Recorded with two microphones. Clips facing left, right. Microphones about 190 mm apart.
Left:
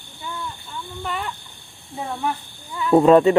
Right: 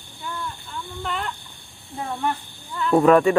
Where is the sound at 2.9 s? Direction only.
25° left (ahead or behind).